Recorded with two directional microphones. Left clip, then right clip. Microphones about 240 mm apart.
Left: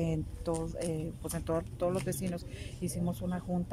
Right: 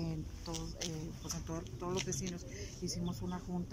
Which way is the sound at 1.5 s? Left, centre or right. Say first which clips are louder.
Left 12 dB; left.